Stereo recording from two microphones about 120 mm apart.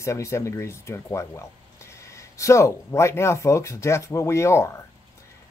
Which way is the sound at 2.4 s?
25° left (ahead or behind).